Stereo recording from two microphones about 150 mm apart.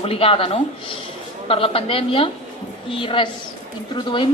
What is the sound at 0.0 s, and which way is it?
A woman's voice, 40° left (ahead or behind).